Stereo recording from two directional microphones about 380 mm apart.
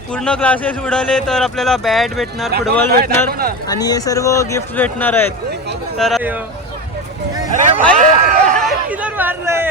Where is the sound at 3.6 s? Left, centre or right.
Centre.